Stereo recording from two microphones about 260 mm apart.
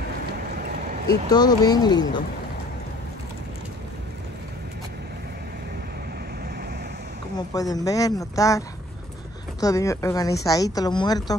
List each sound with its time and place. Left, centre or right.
1.3 s a woman's voice: centre
7.3 s a woman's voice: centre